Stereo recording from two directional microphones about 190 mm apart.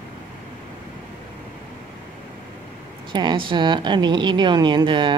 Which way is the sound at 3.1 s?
25° right (ahead or behind).